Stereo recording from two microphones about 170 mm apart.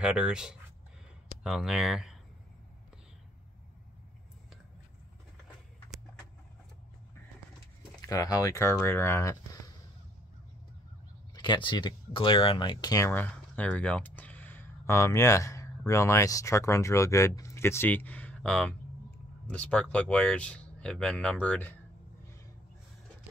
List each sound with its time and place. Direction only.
0.0 s speech: 5° right (ahead or behind)
8.1 s speech: 20° left (ahead or behind)
11.3 s speech: 25° left (ahead or behind); by 21.7 s 10° left (ahead or behind)